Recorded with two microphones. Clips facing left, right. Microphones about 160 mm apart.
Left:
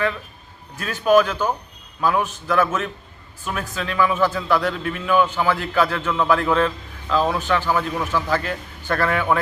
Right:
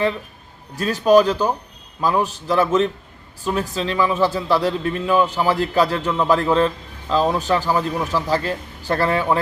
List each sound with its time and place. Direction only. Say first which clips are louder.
0.8 s a man's voice: right 3 dB; 35° right (ahead or behind)